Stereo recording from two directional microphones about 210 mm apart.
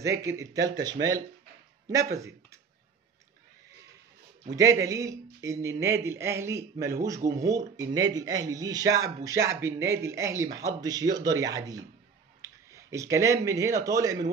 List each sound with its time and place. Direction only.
0.0 s a man's voice: 15° right (ahead or behind)
4.5 s a man's voice: 15° right (ahead or behind)